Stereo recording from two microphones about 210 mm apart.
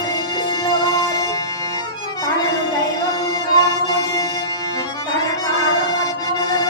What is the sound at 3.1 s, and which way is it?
Music, 15° left (ahead or behind).